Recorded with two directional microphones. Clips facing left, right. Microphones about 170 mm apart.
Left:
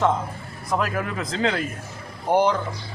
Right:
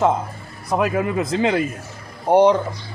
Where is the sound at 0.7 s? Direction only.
20° right (ahead or behind).